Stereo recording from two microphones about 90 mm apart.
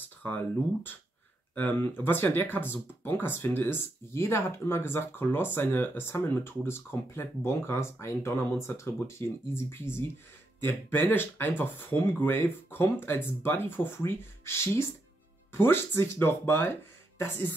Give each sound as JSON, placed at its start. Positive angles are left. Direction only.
{"t": 1.5, "sound": "speech", "side_deg": 20}